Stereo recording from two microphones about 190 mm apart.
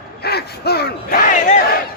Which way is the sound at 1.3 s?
40° left (ahead or behind).